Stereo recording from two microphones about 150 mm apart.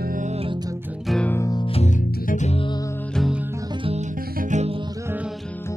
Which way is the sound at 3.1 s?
Centre (ahead or behind).